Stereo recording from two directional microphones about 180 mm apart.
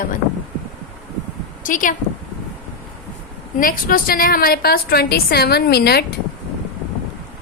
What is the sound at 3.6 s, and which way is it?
A woman's voice, 50° left (ahead or behind).